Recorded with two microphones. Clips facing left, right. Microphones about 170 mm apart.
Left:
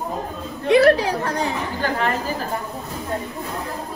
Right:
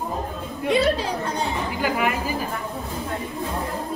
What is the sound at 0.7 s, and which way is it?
Speech, 70° left (ahead or behind).